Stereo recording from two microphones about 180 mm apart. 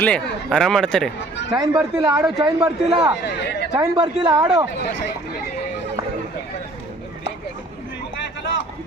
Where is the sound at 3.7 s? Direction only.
25° right (ahead or behind).